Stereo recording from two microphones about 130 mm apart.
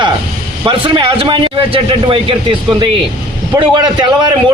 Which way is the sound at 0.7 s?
40° right (ahead or behind).